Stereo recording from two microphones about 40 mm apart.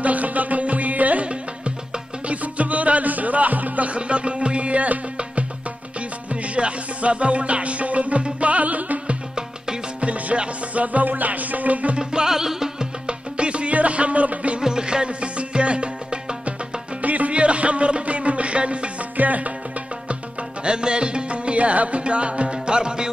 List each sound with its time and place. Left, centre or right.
0.0 s music: right
6.5 s music: right
12.0 s music: centre
13.0 s music: right
14.6 s music: centre
17.0 s music: right
19.1 s music: right
20.6 s music: right